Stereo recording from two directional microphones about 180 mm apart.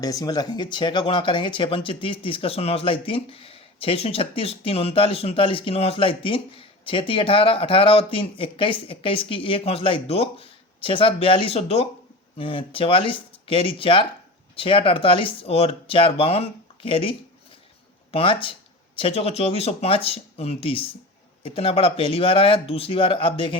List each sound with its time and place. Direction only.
0.0 s speech: 20° left (ahead or behind)